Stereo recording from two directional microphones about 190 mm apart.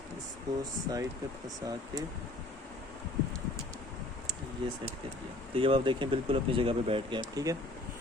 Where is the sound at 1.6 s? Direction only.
20° right (ahead or behind).